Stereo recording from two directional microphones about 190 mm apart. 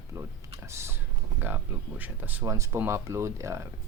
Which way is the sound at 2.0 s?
10° right (ahead or behind).